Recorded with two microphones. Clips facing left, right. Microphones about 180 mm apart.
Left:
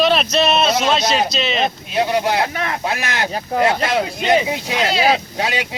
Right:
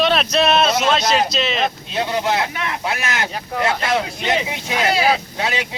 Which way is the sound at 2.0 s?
35° left (ahead or behind).